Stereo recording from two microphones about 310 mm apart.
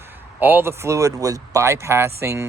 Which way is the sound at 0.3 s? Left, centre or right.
Centre.